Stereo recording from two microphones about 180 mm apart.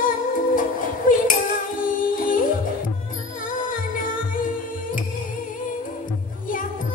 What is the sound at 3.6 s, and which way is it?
Music, 50° left (ahead or behind).